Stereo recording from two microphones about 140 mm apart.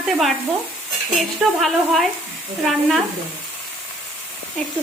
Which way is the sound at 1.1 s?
Centre (ahead or behind).